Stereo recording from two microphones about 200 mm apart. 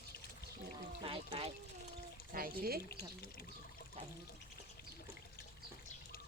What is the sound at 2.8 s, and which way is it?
Speech, 50° left (ahead or behind).